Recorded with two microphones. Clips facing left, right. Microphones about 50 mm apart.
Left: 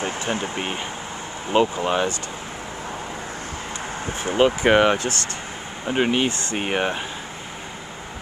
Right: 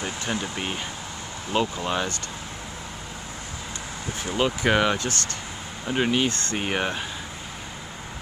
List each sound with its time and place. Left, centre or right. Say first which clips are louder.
0.0 s speech: left 4 dB; left
4.0 s speech: left 6 dB; left; by 7.0 s centre